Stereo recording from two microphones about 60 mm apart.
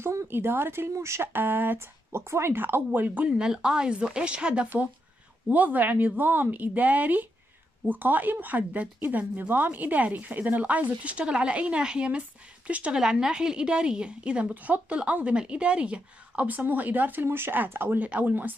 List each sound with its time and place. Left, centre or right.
0.0 s speech: right
1.3 s speech: right
3.3 s a woman's voice: centre
9.5 s a woman's voice: right
17.9 s a woman's voice: right